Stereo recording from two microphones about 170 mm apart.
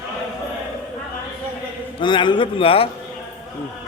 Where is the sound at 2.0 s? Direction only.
25° left (ahead or behind).